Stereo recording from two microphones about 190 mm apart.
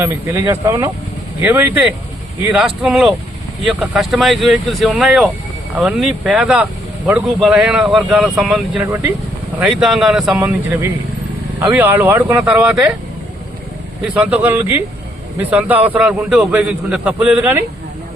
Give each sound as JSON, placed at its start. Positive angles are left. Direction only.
{"t": 0.0, "sound": "a man's voice", "side_deg": -15}
{"t": 10.4, "sound": "a man's voice", "side_deg": -15}
{"t": 14.0, "sound": "a man's voice", "side_deg": -5}